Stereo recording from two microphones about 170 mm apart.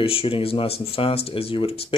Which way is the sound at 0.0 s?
35° left (ahead or behind).